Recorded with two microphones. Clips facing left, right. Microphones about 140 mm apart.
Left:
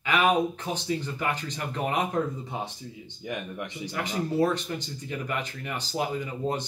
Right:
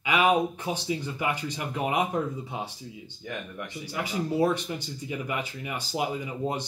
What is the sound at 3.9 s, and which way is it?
Speech, 10° right (ahead or behind).